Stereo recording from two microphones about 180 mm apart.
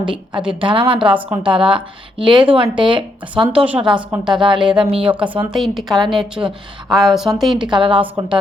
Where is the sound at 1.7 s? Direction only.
30° right (ahead or behind).